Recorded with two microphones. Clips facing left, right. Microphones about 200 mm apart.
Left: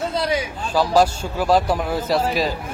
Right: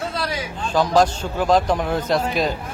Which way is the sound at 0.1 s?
20° left (ahead or behind).